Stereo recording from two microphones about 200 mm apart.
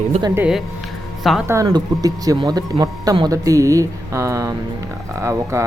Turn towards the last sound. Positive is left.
turn(degrees=-15)  # may be behind; listen again after turning